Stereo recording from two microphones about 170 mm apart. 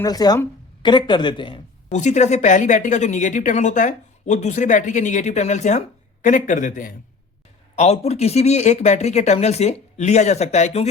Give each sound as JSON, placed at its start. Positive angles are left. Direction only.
{"t": 0.0, "sound": "speech", "side_deg": 25}
{"t": 1.9, "sound": "a woman's voice", "side_deg": 45}
{"t": 7.8, "sound": "speech", "side_deg": 40}